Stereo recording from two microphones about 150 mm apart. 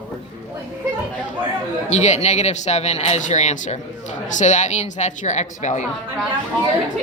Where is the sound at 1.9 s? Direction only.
50° left (ahead or behind).